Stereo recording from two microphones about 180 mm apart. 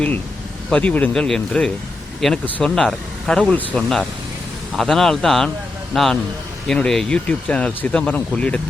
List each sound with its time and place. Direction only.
0.7 s speech: 5° left (ahead or behind)